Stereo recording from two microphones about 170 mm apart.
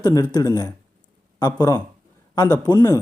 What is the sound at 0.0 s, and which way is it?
Speech, 20° left (ahead or behind).